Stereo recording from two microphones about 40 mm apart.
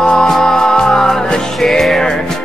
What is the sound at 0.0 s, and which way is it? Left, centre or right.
Music, centre.